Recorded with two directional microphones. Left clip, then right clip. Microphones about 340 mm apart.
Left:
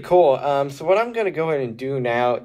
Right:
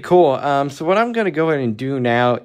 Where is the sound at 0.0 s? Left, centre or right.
Right.